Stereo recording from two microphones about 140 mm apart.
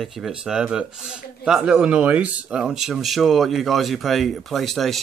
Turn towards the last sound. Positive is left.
turn(degrees=0)  # may be behind; listen again after turning